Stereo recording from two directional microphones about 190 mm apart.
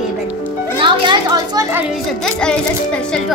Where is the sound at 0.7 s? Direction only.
25° right (ahead or behind).